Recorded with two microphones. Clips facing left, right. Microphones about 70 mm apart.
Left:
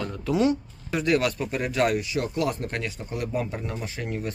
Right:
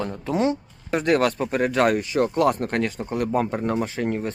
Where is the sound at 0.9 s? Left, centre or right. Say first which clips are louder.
Right 3 dB; right.